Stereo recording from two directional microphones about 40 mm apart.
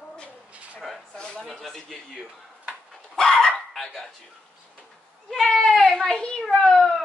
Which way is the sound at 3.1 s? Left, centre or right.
Centre.